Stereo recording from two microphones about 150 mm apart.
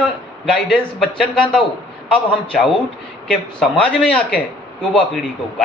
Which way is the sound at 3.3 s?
5° left (ahead or behind).